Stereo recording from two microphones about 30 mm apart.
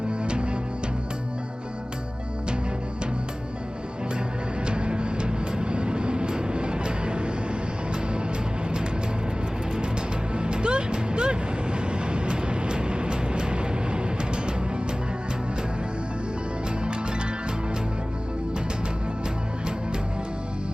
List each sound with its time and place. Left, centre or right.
0.1 s music: right
4.6 s music: right
10.3 s music: right